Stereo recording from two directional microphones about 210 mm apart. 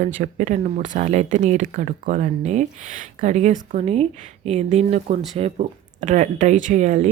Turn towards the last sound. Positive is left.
turn(degrees=-35)  # may be behind; listen again after turning